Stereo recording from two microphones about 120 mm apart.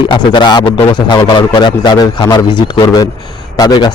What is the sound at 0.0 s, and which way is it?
Speech, 40° left (ahead or behind).